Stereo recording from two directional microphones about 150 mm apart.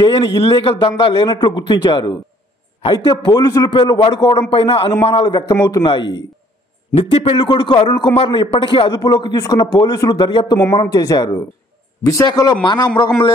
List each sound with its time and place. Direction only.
0.0 s a man's voice: 30° left (ahead or behind)